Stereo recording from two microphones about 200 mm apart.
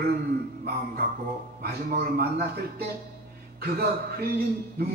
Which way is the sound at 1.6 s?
50° right (ahead or behind).